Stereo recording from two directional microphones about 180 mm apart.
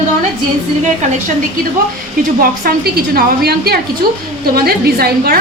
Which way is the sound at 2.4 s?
55° right (ahead or behind).